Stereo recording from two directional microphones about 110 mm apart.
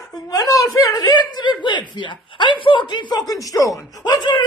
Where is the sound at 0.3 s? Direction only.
35° left (ahead or behind).